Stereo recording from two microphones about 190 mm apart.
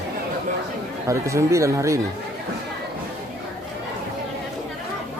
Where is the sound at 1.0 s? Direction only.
15° right (ahead or behind).